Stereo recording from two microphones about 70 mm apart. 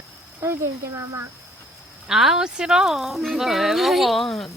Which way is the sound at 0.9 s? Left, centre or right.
Right.